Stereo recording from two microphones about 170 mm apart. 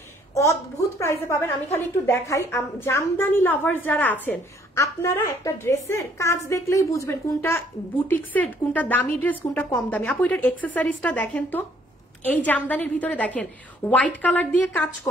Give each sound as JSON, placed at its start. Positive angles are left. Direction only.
{"t": 0.3, "sound": "a woman's voice", "side_deg": 15}